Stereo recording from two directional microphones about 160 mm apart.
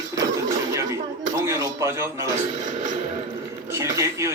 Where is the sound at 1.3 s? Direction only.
20° right (ahead or behind).